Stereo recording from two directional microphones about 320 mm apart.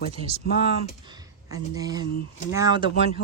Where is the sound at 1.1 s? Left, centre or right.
Centre.